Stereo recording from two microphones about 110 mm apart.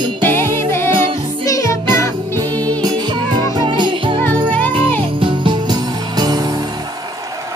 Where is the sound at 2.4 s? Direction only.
35° right (ahead or behind).